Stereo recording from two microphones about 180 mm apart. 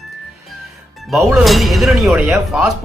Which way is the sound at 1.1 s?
Centre (ahead or behind).